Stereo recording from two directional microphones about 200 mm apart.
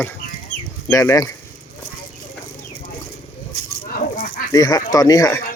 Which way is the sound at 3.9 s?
45° left (ahead or behind).